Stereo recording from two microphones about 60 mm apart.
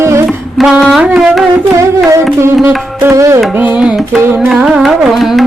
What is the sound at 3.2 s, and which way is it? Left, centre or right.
Carnatic music, right.